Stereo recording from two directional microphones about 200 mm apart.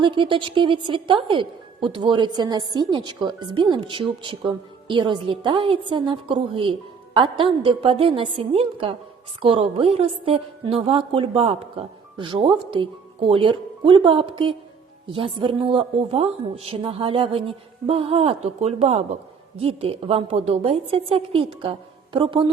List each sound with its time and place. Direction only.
0.0 s a woman's voice: 25° right (ahead or behind)